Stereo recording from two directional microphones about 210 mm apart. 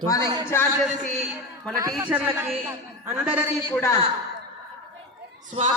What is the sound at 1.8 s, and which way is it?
Speech, 10° right (ahead or behind).